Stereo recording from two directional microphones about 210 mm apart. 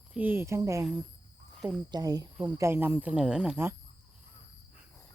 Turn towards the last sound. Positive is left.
turn(degrees=-10)  # may be behind; listen again after turning